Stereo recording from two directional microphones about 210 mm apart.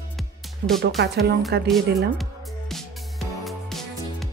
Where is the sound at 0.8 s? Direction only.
55° right (ahead or behind).